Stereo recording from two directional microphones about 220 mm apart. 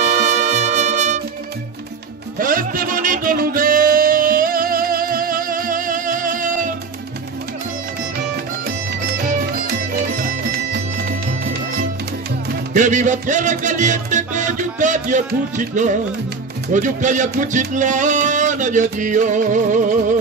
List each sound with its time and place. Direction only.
0.0 s music: 30° right (ahead or behind)
2.3 s music: 40° right (ahead or behind)
9.9 s music: 45° right (ahead or behind)
12.7 s music: 35° right (ahead or behind)